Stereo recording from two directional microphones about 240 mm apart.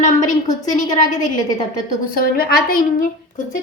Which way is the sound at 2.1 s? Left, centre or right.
Left.